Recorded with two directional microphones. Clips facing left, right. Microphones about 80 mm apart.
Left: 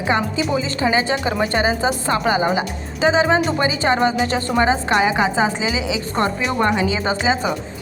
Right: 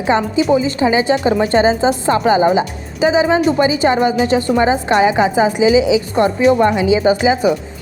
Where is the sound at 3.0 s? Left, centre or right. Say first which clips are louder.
Right 3 dB; centre.